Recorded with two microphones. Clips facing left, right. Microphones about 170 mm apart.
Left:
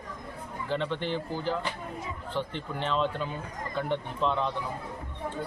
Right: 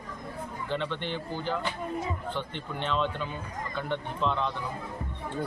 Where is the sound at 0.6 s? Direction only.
35° left (ahead or behind).